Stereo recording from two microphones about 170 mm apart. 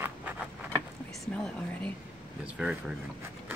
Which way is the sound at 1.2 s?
5° left (ahead or behind).